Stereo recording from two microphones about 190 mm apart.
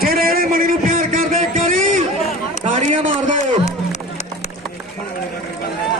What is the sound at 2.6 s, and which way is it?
Run, 40° right (ahead or behind).